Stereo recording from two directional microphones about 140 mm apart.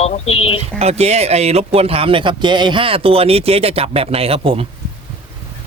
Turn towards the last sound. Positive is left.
turn(degrees=-40)  # may be behind; listen again after turning